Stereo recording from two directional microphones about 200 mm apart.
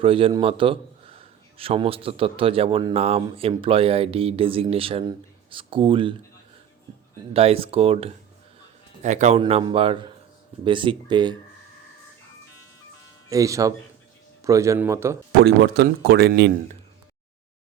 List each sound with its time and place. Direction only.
0.0 s a man's voice: 25° right (ahead or behind)
7.3 s a man's voice: 30° right (ahead or behind)
9.4 s a man's voice: 25° right (ahead or behind)
13.3 s speech: 15° right (ahead or behind)
15.4 s speech: 55° right (ahead or behind)